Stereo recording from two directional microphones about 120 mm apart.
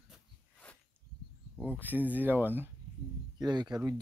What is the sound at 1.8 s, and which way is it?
Speech, 15° right (ahead or behind).